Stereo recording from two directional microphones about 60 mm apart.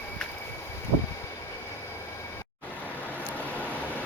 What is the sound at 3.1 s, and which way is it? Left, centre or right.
Vehicle, left.